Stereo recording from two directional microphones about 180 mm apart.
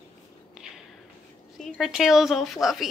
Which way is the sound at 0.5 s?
5° right (ahead or behind).